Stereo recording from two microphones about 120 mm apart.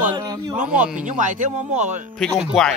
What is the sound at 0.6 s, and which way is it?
Speech, 10° right (ahead or behind).